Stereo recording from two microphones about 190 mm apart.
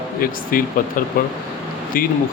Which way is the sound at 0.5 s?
50° left (ahead or behind).